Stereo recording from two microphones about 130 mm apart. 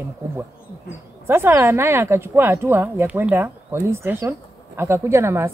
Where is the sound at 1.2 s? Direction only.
20° right (ahead or behind).